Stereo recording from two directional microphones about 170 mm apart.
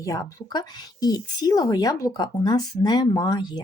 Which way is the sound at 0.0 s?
20° left (ahead or behind).